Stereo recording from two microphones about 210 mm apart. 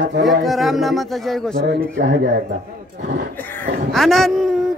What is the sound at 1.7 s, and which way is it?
Speech, 55° right (ahead or behind).